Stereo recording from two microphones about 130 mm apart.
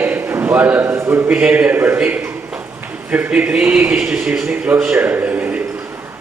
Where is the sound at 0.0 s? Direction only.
15° right (ahead or behind).